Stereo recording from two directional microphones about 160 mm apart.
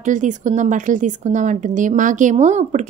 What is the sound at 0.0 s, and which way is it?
A woman's voice, 50° right (ahead or behind).